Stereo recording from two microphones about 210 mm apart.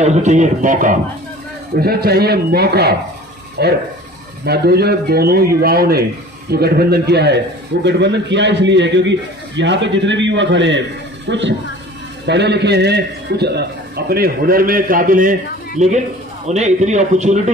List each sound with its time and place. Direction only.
0.0 s a man's voice: 35° right (ahead or behind)